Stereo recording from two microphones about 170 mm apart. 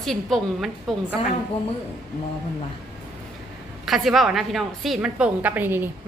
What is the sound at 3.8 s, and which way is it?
A woman's voice, centre (ahead or behind).